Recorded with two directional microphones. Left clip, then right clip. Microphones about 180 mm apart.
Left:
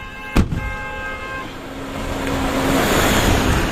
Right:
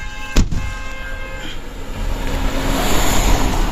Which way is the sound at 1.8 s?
65° left (ahead or behind).